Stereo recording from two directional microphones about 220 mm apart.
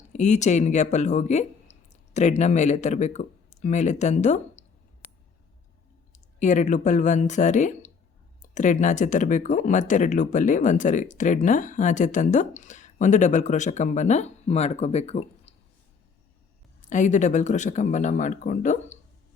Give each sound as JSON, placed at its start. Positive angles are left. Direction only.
{"t": 0.1, "sound": "speech", "side_deg": 30}
{"t": 6.4, "sound": "speech", "side_deg": 35}
{"t": 16.9, "sound": "speech", "side_deg": 35}